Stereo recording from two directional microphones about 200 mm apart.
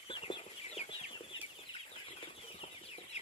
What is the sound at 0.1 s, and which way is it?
Chicken, 25° left (ahead or behind).